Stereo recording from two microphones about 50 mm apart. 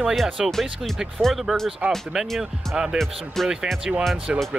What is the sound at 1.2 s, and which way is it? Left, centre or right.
Speech, right.